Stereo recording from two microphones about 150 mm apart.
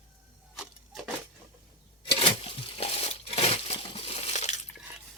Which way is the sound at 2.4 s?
40° left (ahead or behind).